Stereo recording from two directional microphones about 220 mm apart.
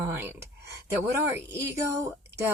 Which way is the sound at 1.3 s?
10° right (ahead or behind).